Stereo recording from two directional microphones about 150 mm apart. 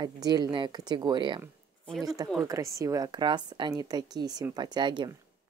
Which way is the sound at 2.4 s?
20° right (ahead or behind).